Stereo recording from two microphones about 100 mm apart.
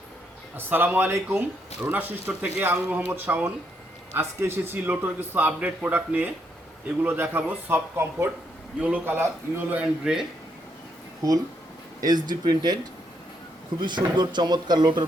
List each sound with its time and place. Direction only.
0.5 s a man's voice: 20° right (ahead or behind)
11.9 s speech: 40° right (ahead or behind)
13.8 s speech: 50° right (ahead or behind)